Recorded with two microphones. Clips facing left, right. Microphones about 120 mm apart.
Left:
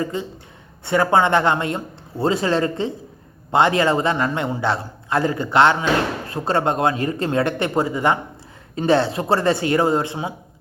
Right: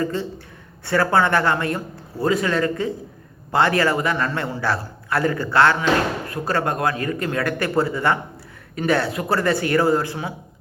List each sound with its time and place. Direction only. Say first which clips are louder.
0.0 s a man's voice: right 1 dB; 15° left (ahead or behind)